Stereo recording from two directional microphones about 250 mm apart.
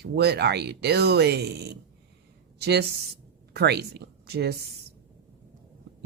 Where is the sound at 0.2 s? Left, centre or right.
Right.